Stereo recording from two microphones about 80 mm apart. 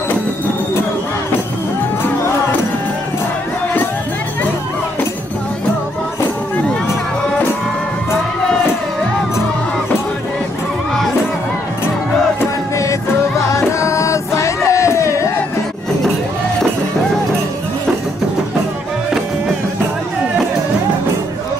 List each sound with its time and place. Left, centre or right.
13.7 s music: left